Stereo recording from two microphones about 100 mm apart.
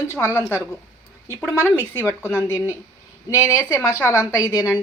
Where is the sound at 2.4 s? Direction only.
25° left (ahead or behind); by 4.7 s 40° left (ahead or behind).